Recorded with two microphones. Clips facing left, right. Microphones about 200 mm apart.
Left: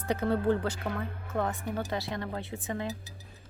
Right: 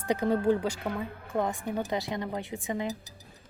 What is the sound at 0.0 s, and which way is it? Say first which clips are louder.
Speech: right 2 dB; 15° right (ahead or behind).